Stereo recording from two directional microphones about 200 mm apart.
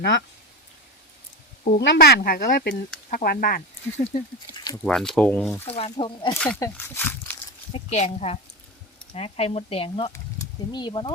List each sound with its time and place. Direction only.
0.0 s speech: 55° left (ahead or behind)
1.8 s speech: 55° left (ahead or behind); by 4.3 s 40° left (ahead or behind)
4.5 s a sound: 20° left (ahead or behind)
4.8 s speech: 5° left (ahead or behind)
5.6 s speech: 30° left (ahead or behind)
6.3 s speech: 10° left (ahead or behind)
7.7 s speech: 35° left (ahead or behind)